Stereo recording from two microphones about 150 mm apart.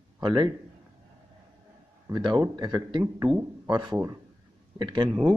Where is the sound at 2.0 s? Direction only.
30° right (ahead or behind).